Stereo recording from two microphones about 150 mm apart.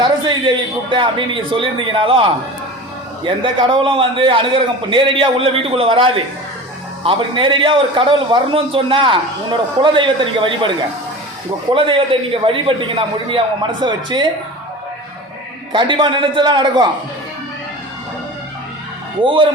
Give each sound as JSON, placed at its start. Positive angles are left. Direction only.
{"t": 0.0, "sound": "a man's voice", "side_deg": -30}
{"t": 11.7, "sound": "a man's voice", "side_deg": -35}
{"t": 15.7, "sound": "a man's voice", "side_deg": -30}
{"t": 19.2, "sound": "a man's voice", "side_deg": -35}